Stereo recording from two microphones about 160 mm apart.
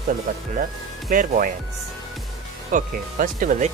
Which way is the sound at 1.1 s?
55° right (ahead or behind).